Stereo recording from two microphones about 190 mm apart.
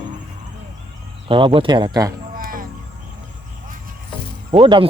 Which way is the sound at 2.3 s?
50° right (ahead or behind).